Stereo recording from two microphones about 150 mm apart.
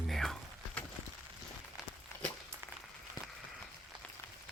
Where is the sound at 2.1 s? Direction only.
20° left (ahead or behind).